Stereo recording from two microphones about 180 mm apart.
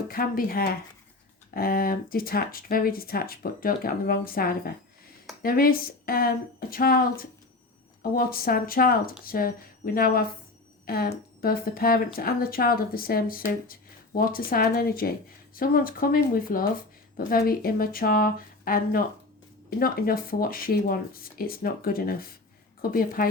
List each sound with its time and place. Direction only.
0.1 s speech: 55° left (ahead or behind)